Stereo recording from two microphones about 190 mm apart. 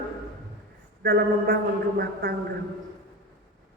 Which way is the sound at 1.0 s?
55° right (ahead or behind).